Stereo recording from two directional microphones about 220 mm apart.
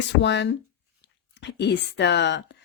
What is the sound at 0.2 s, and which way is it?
Speech, 55° left (ahead or behind).